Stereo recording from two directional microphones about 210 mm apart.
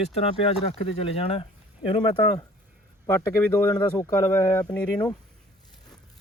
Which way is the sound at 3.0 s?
20° left (ahead or behind).